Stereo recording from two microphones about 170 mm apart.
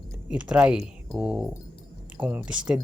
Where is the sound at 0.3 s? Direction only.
5° right (ahead or behind).